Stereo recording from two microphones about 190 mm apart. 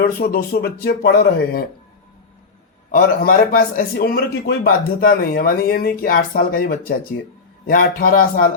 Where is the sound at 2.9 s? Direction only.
50° left (ahead or behind).